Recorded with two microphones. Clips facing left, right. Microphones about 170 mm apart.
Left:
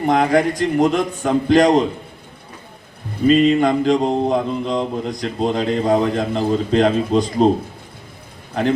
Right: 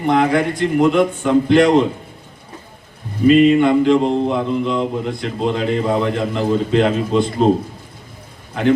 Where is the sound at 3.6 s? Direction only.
40° left (ahead or behind).